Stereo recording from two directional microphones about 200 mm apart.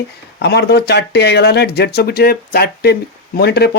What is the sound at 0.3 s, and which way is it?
Speech, 55° left (ahead or behind).